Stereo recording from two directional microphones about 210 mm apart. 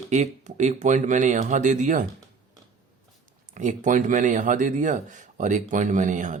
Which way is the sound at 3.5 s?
35° right (ahead or behind).